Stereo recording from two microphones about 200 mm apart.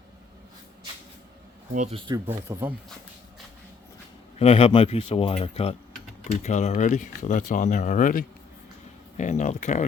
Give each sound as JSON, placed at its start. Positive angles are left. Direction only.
{"t": 1.7, "sound": "speech", "side_deg": -35}
{"t": 2.0, "sound": "speech", "side_deg": -15}
{"t": 4.4, "sound": "speech", "side_deg": 30}